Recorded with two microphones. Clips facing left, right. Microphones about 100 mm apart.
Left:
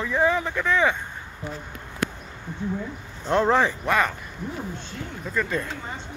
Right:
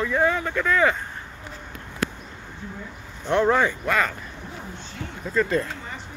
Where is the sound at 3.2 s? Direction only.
30° left (ahead or behind).